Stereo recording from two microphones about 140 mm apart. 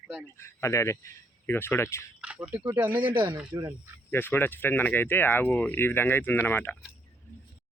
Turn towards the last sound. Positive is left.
turn(degrees=15)  # may be behind; listen again after turning